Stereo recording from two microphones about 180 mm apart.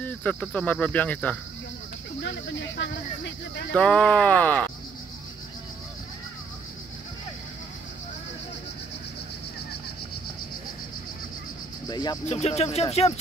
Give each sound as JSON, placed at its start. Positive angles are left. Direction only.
{"t": 0.0, "sound": "speech", "side_deg": 10}
{"t": 2.2, "sound": "speech", "side_deg": 80}
{"t": 3.7, "sound": "speech", "side_deg": 5}
{"t": 11.9, "sound": "speech", "side_deg": 25}
{"t": 12.3, "sound": "speech", "side_deg": 35}